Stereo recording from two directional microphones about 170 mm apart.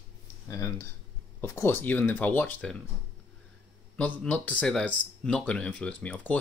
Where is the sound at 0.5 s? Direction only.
20° left (ahead or behind).